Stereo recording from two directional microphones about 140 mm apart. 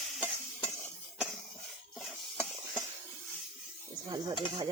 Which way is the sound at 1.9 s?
5° left (ahead or behind).